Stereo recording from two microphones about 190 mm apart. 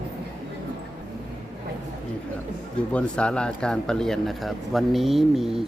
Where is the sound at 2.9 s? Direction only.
5° left (ahead or behind).